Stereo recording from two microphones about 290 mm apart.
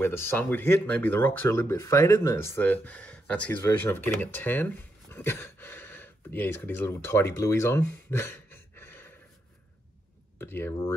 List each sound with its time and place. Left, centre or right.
0.0 s speech: centre
10.4 s speech: centre